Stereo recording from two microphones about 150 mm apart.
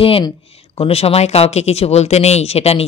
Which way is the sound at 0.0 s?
35° left (ahead or behind).